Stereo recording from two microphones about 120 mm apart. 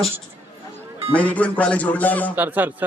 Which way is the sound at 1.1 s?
10° left (ahead or behind).